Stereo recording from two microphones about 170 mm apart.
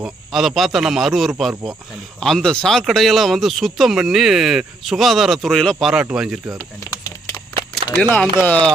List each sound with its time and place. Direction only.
0.0 s speech: centre (ahead or behind)
6.6 s a sound: 20° left (ahead or behind)
8.1 s speech: 10° left (ahead or behind)